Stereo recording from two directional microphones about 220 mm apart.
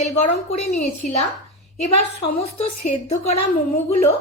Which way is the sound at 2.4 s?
30° left (ahead or behind).